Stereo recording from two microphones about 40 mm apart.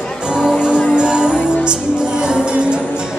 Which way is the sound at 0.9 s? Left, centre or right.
Right.